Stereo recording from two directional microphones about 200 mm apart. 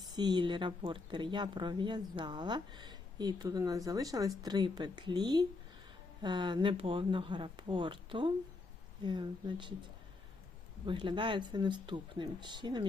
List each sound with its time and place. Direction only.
0.2 s speech: 20° right (ahead or behind)
10.8 s speech: 25° right (ahead or behind)